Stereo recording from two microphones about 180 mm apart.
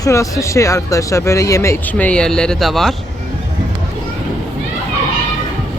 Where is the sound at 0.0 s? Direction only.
15° left (ahead or behind); by 2.9 s centre (ahead or behind).